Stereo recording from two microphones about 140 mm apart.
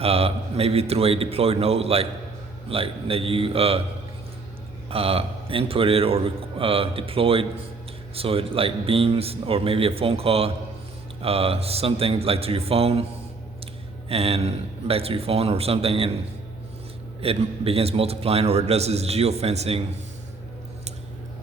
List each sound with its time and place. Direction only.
0.0 s a man's voice: 45° right (ahead or behind)
4.9 s a man's voice: 45° right (ahead or behind)
14.1 s a man's voice: 45° right (ahead or behind)
17.2 s a man's voice: 45° right (ahead or behind)